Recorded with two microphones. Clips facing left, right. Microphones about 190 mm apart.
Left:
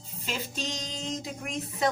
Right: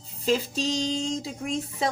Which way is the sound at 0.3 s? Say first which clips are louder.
Right 10 dB; 35° right (ahead or behind).